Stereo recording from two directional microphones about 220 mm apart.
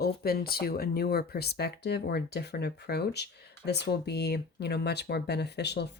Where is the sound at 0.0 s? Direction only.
45° left (ahead or behind).